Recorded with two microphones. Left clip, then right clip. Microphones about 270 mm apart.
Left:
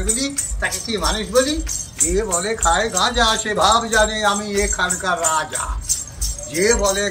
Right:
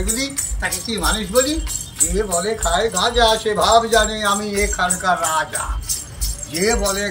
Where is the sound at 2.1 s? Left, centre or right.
Centre.